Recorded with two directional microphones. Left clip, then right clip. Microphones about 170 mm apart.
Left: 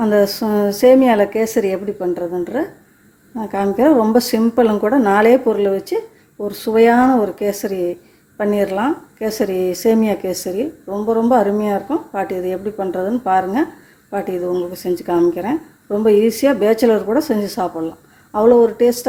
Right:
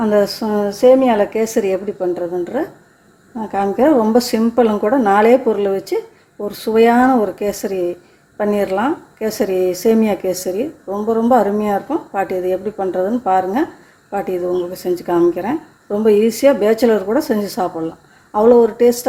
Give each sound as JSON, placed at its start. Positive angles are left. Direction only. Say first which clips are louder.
{"t": 0.0, "sound": "speech", "louder": "even", "side_deg": 10}